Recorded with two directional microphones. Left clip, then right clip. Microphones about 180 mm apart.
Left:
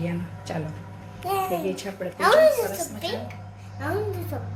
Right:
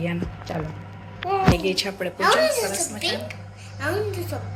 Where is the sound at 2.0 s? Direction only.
10° right (ahead or behind).